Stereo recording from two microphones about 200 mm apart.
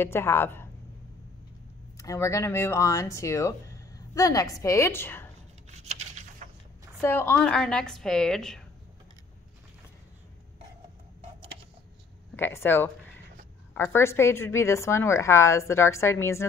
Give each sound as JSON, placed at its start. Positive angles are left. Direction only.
{"t": 0.0, "sound": "a woman's voice", "side_deg": 10}
{"t": 2.0, "sound": "a woman's voice", "side_deg": 15}
{"t": 5.9, "sound": "a sound", "side_deg": -35}
{"t": 7.0, "sound": "a woman's voice", "side_deg": 10}
{"t": 12.4, "sound": "a woman's voice", "side_deg": 10}